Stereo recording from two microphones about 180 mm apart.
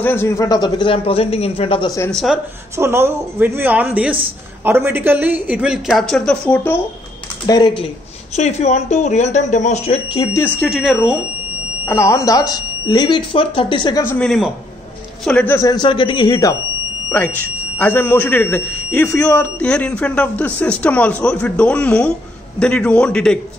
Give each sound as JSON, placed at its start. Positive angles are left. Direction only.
{"t": 0.0, "sound": "speech", "side_deg": 15}
{"t": 2.0, "sound": "speech", "side_deg": 0}
{"t": 2.8, "sound": "a woman's voice", "side_deg": -15}
{"t": 7.4, "sound": "speech", "side_deg": 20}
{"t": 8.4, "sound": "speech", "side_deg": 40}
{"t": 10.3, "sound": "speech", "side_deg": 10}
{"t": 10.7, "sound": "speech", "side_deg": 0}
{"t": 11.9, "sound": "speech", "side_deg": 15}
{"t": 14.0, "sound": "speech", "side_deg": 5}
{"t": 17.1, "sound": "speech", "side_deg": 10}